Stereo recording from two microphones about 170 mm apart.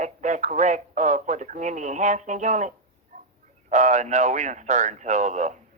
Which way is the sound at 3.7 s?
45° right (ahead or behind).